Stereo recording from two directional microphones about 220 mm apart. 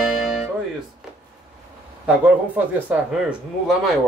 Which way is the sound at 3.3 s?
Centre (ahead or behind).